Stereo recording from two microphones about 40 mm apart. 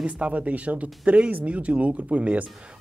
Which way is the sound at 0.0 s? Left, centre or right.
Right.